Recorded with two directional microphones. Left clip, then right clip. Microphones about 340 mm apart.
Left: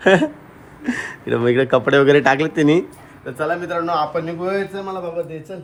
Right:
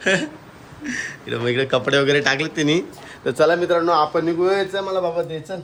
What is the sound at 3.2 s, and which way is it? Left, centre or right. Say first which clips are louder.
Speech: right 7 dB; right.